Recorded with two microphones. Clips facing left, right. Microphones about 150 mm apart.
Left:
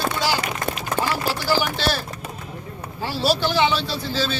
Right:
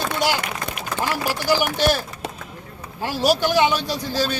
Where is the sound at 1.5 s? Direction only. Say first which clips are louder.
Right 4 dB; 15° right (ahead or behind).